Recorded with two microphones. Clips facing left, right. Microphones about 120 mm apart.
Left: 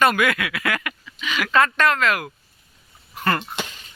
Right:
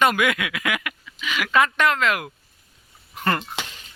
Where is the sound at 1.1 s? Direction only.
5° right (ahead or behind); by 2.3 s 20° right (ahead or behind).